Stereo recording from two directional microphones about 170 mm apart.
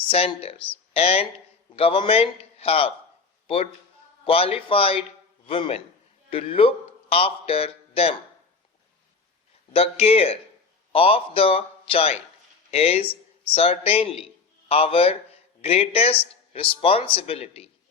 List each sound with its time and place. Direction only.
0.1 s a man's voice: 35° left (ahead or behind)
9.7 s speech: 35° left (ahead or behind)